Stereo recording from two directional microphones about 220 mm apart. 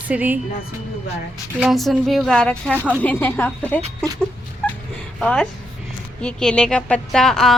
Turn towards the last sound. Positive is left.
turn(degrees=0)  # may be behind; listen again after turning